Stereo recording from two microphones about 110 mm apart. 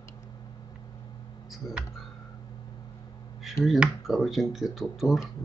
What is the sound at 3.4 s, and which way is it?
Speech, centre (ahead or behind).